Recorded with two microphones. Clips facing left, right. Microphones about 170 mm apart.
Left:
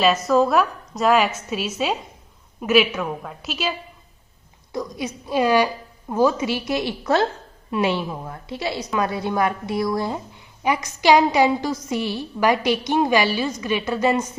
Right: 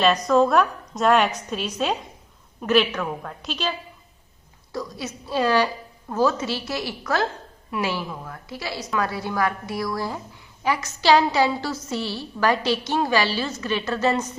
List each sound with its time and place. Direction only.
0.0 s a woman's voice: 5° left (ahead or behind)
4.7 s a woman's voice: 15° left (ahead or behind)